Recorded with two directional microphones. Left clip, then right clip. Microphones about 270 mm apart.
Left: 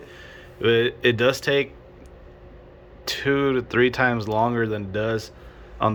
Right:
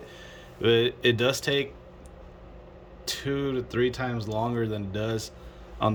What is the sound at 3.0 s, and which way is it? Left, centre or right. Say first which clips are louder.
Speech: left 8 dB; centre.